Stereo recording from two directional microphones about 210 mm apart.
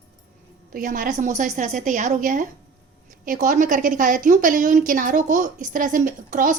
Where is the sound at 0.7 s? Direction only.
40° right (ahead or behind).